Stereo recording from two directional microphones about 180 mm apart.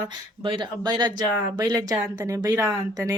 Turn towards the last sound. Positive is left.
turn(degrees=-20)  # may be behind; listen again after turning